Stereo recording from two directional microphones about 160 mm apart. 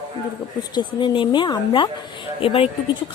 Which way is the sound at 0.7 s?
30° left (ahead or behind).